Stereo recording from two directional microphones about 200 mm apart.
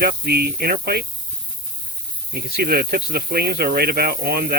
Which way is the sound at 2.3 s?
50° right (ahead or behind).